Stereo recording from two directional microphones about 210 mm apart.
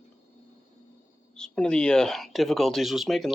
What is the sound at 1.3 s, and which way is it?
Speech, 5° left (ahead or behind).